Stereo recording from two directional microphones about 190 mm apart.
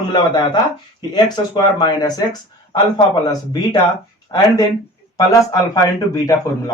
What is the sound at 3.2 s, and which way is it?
Speech, 20° left (ahead or behind).